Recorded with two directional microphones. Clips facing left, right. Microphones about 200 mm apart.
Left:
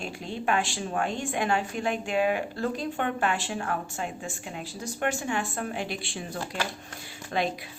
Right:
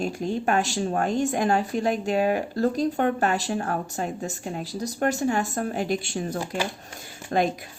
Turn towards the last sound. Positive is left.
turn(degrees=-40)  # may be behind; listen again after turning